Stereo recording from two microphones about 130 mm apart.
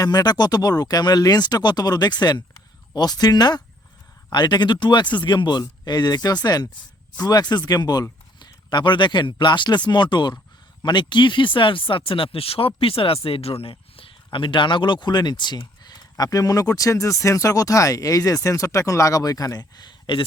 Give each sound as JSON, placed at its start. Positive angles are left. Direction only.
{"t": 0.0, "sound": "speech", "side_deg": 30}